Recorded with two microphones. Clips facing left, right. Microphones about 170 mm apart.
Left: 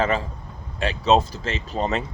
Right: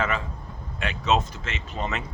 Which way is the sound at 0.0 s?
35° left (ahead or behind).